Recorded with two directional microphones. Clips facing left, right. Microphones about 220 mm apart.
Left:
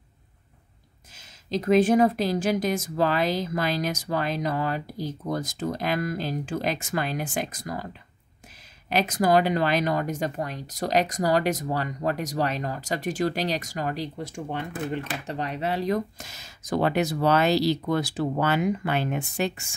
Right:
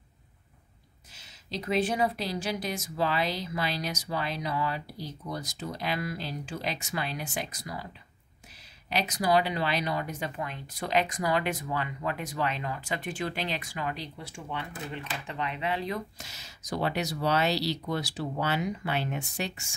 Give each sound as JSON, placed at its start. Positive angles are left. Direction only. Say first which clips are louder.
{"t": 1.1, "sound": "speech", "louder": "left 9 dB", "side_deg": 45}